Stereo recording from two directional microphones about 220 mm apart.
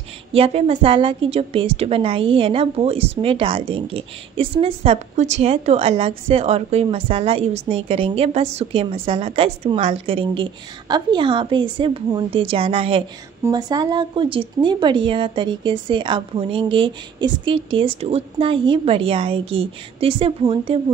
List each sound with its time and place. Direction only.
0.3 s a woman's voice: 25° right (ahead or behind)